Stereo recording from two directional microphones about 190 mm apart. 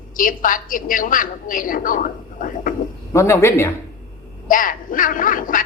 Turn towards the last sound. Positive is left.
turn(degrees=45)  # may be behind; listen again after turning